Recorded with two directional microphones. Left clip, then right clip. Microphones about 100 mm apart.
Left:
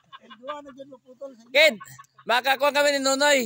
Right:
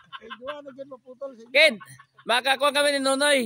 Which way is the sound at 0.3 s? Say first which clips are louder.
Even; 25° right (ahead or behind).